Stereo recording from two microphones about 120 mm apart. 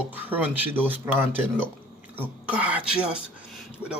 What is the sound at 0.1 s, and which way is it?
Speech, 15° right (ahead or behind).